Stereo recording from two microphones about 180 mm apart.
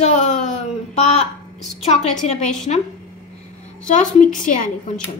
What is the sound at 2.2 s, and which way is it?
A woman's voice, 40° left (ahead or behind).